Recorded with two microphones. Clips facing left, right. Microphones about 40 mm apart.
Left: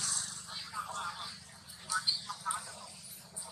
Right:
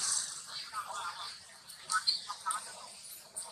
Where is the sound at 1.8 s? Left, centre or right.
Centre.